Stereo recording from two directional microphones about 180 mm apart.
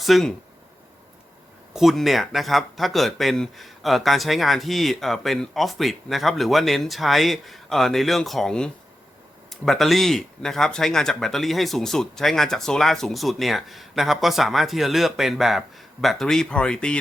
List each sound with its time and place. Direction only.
0.0 s speech: centre (ahead or behind)
1.7 s speech: centre (ahead or behind)